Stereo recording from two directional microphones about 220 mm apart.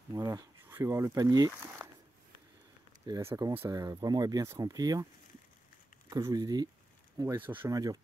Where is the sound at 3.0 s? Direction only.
15° right (ahead or behind).